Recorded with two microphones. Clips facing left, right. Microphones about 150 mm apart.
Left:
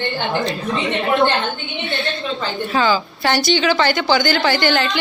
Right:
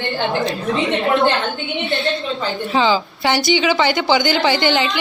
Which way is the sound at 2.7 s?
20° right (ahead or behind).